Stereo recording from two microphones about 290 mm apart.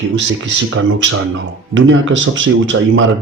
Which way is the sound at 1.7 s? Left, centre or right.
Right.